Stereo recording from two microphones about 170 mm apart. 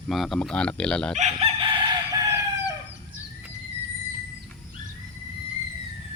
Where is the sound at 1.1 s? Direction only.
45° right (ahead or behind).